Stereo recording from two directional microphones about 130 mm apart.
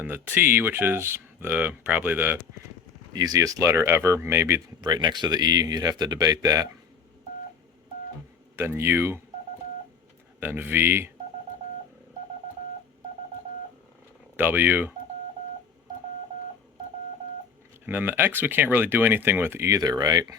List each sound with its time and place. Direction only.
0.0 s speech: 15° right (ahead or behind)
3.1 s speech: 30° right (ahead or behind)
4.8 s speech: 35° right (ahead or behind)
8.5 s speech: 20° right (ahead or behind)
10.4 s speech: 15° right (ahead or behind)
14.3 s speech: 15° right (ahead or behind)
17.8 s speech: 15° right (ahead or behind)